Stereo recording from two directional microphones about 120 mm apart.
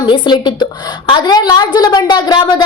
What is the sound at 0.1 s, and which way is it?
A woman's voice, 40° left (ahead or behind).